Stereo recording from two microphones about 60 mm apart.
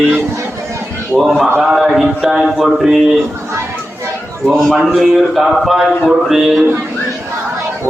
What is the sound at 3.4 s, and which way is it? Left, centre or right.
Chatter, right.